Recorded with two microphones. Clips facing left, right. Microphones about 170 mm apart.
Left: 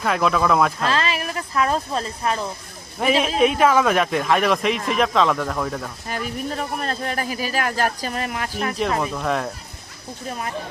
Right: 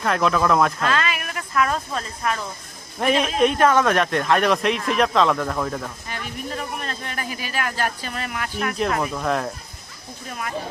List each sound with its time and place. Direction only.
0.0 s speech: centre (ahead or behind)
0.9 s speech: 30° left (ahead or behind)
3.0 s speech: centre (ahead or behind)
6.1 s speech: 40° left (ahead or behind)
9.0 s speech: centre (ahead or behind)